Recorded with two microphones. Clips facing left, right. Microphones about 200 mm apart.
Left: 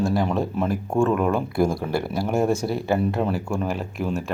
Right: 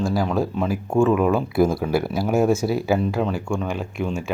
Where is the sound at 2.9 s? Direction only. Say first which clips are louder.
Even; 5° left (ahead or behind).